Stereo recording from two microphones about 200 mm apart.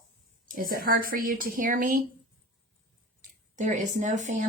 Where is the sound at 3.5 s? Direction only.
35° right (ahead or behind).